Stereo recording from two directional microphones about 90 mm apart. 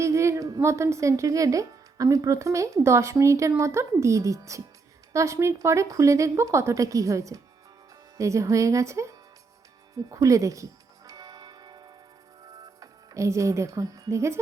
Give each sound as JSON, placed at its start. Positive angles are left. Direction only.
{"t": 0.0, "sound": "speech", "side_deg": -35}
{"t": 10.1, "sound": "music", "side_deg": -40}
{"t": 12.8, "sound": "speech", "side_deg": -35}